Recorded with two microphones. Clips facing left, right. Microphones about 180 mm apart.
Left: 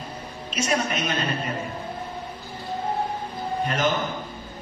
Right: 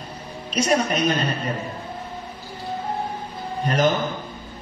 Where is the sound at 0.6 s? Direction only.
40° right (ahead or behind).